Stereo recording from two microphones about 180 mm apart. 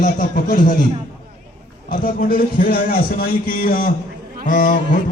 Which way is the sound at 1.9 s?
50° left (ahead or behind).